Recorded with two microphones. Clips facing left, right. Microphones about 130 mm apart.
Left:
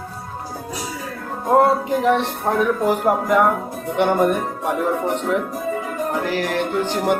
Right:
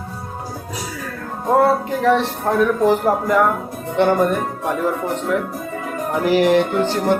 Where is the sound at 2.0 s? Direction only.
15° left (ahead or behind).